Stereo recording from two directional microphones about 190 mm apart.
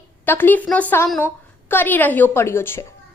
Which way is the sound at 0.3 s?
10° left (ahead or behind).